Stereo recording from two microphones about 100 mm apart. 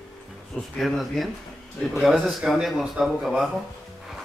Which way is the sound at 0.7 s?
Centre (ahead or behind).